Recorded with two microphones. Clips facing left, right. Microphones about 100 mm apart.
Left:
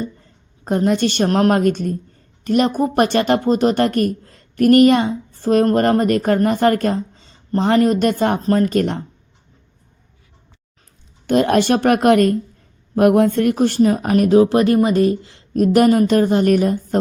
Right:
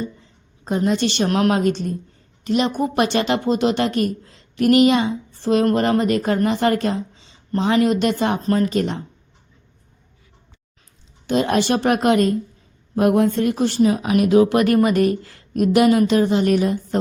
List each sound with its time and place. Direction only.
0.0 s a woman's voice: 50° left (ahead or behind)
1.5 s speech: 50° left (ahead or behind)
11.3 s speech: 55° left (ahead or behind); by 15.4 s 25° left (ahead or behind)
15.5 s speech: 40° left (ahead or behind)